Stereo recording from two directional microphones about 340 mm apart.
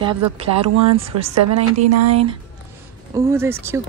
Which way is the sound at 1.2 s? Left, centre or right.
Right.